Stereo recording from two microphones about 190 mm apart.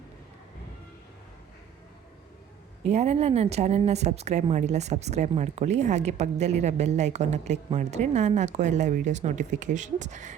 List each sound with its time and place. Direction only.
2.8 s a woman's voice: 35° right (ahead or behind)